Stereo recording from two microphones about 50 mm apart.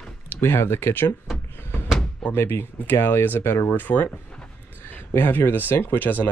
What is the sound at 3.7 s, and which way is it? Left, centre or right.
Speech, left.